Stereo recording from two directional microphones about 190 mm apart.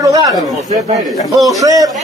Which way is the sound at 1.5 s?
20° right (ahead or behind).